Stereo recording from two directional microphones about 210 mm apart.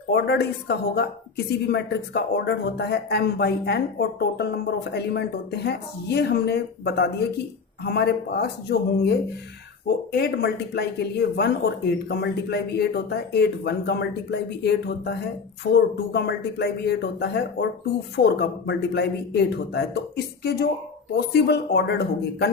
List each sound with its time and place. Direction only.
0.1 s speech: 50° left (ahead or behind)